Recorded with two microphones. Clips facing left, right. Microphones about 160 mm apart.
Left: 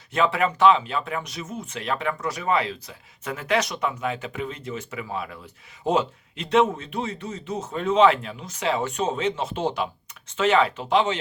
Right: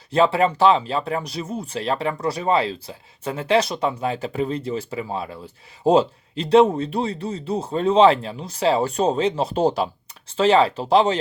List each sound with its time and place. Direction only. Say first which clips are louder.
0.1 s speech: right 5 dB; 30° right (ahead or behind)